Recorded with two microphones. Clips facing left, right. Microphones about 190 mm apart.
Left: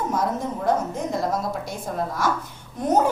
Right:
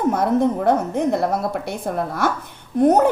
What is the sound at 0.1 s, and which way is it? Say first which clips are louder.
A woman's voice: right 7 dB; 60° right (ahead or behind).